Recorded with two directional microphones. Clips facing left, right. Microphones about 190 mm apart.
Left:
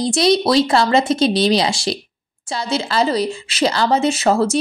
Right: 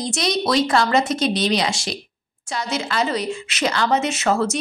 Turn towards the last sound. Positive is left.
turn(degrees=35)  # may be behind; listen again after turning